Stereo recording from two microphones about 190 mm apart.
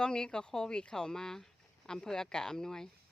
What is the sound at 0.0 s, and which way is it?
Speech, 5° left (ahead or behind).